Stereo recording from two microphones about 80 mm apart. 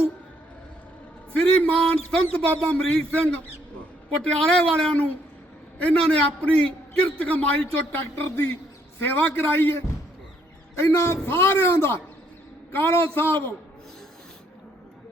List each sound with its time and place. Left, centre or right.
1.3 s a man's voice: centre
7.9 s a man's voice: left